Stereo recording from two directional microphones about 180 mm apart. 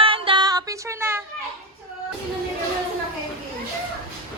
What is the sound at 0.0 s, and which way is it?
Music, 30° right (ahead or behind).